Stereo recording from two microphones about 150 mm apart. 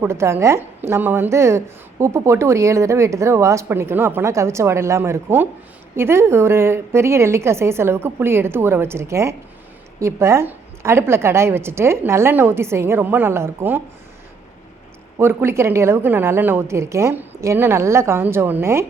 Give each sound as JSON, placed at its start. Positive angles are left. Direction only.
{"t": 0.0, "sound": "a woman's voice", "side_deg": -15}
{"t": 15.2, "sound": "a woman's voice", "side_deg": -15}